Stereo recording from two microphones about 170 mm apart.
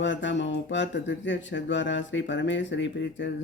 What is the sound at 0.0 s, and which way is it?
Speech, 90° left.